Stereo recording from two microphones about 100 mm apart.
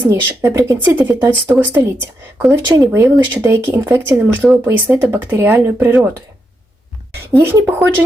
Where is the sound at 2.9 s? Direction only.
25° right (ahead or behind).